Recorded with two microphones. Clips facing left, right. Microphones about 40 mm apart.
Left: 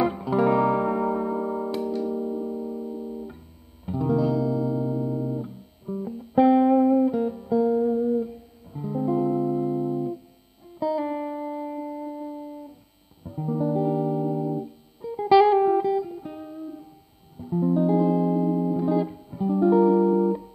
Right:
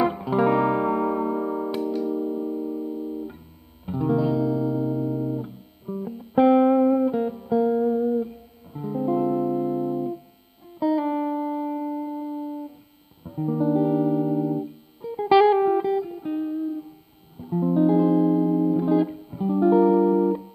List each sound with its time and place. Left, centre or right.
0.0 s music: centre
3.8 s music: centre